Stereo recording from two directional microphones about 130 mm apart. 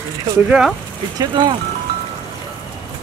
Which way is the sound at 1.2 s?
35° right (ahead or behind).